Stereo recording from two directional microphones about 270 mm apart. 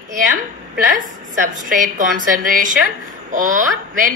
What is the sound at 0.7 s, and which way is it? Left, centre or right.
A woman's voice, right.